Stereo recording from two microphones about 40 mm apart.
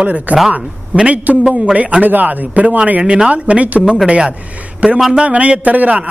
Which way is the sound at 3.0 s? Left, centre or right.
Right.